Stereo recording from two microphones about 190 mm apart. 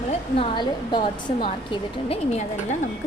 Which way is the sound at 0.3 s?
25° left (ahead or behind).